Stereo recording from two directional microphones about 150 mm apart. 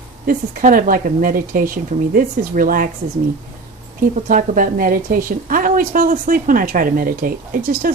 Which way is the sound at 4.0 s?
60° right (ahead or behind).